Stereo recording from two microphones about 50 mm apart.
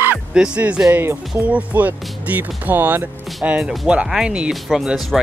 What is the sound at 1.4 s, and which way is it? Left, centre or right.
Speech, right.